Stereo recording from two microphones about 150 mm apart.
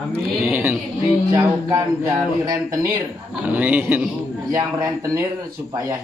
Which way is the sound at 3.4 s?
10° right (ahead or behind).